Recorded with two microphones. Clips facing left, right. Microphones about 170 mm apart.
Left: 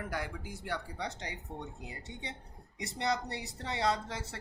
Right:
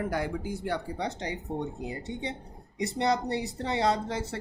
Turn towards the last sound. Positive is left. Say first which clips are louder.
# right 5 dB
turn(degrees=-25)  # may be behind; listen again after turning